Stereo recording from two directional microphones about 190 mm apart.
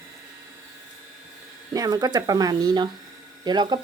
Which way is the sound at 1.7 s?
20° right (ahead or behind).